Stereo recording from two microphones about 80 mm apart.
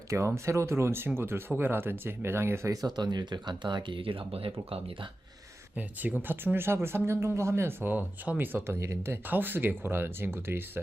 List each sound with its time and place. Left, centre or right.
0.1 s speech: right
2.8 s speech: right
5.7 s speech: right
8.5 s speech: right
9.2 s speech: right